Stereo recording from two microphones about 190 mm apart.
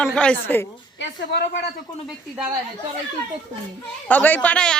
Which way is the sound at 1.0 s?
60° left (ahead or behind).